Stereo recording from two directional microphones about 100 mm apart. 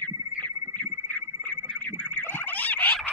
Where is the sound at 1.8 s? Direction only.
15° left (ahead or behind).